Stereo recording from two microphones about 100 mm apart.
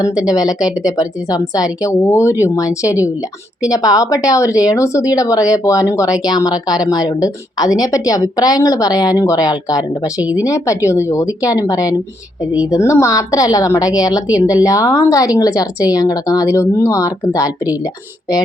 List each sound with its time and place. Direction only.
0.3 s a woman's voice: 40° left (ahead or behind)
10.2 s speech: 10° right (ahead or behind)
10.4 s a woman's voice: 30° left (ahead or behind)